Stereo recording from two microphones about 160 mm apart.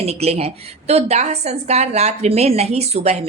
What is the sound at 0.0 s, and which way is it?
A woman's voice, 40° right (ahead or behind).